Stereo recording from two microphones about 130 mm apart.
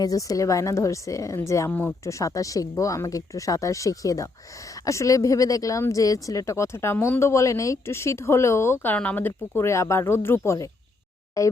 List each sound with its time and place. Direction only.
0.0 s speech: 30° left (ahead or behind)
1.7 s speech: 10° left (ahead or behind)
2.0 s speech: 25° left (ahead or behind)